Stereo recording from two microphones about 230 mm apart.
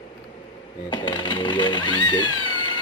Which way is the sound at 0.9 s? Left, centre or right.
Left.